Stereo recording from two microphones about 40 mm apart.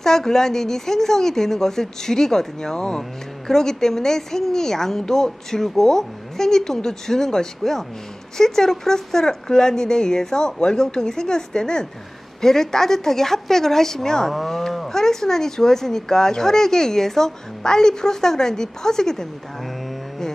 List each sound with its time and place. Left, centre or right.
0.0 s speech: centre
14.9 s speech: centre